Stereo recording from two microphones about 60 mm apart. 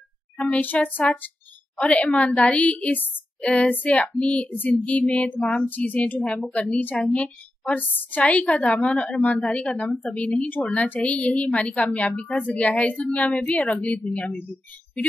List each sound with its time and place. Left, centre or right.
0.4 s a woman's voice: left